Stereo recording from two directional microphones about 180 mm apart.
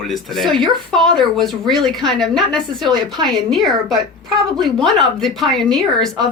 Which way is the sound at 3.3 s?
Centre (ahead or behind).